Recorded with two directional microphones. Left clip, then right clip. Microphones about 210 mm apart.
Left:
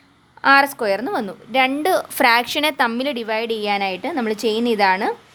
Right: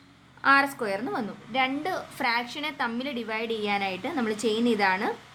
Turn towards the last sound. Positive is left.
turn(degrees=40)  # may be behind; listen again after turning